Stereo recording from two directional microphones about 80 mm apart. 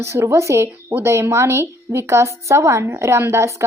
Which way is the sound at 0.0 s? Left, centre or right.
Right.